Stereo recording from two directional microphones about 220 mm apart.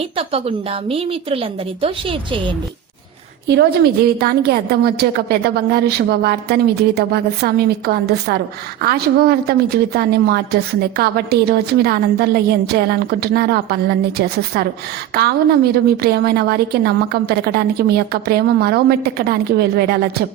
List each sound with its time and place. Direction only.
0.2 s a woman's voice: 25° right (ahead or behind)
3.4 s a woman's voice: 50° right (ahead or behind)